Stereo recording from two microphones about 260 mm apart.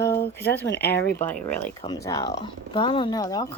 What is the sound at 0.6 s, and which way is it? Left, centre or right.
Speech, left.